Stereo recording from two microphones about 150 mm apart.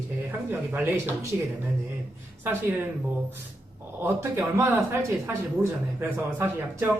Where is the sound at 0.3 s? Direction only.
15° right (ahead or behind).